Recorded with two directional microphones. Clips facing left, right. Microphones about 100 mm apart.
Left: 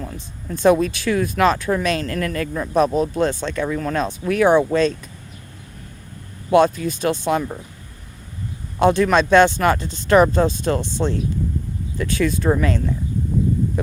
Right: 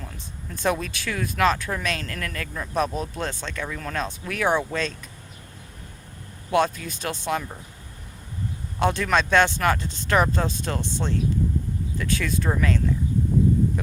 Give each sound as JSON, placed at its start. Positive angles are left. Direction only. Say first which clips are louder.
{"t": 0.5, "sound": "speech", "louder": "left 10 dB", "side_deg": 30}
{"t": 2.7, "sound": "speech", "louder": "left 8 dB", "side_deg": 40}
{"t": 3.2, "sound": "speech", "louder": "left 10 dB", "side_deg": 25}
{"t": 6.5, "sound": "speech", "louder": "left 7 dB", "side_deg": 25}
{"t": 8.8, "sound": "speech", "louder": "left 7 dB", "side_deg": 25}